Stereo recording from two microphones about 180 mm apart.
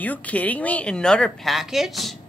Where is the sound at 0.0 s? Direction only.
10° left (ahead or behind).